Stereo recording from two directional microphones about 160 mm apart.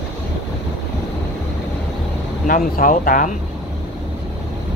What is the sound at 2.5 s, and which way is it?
Speech, 60° left (ahead or behind).